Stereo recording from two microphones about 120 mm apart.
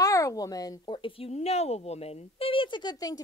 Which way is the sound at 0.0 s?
30° left (ahead or behind).